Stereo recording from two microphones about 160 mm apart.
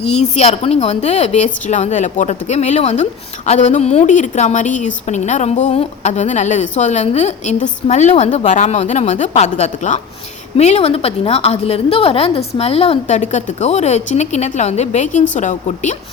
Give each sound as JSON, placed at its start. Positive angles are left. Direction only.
{"t": 0.0, "sound": "a woman's voice", "side_deg": 40}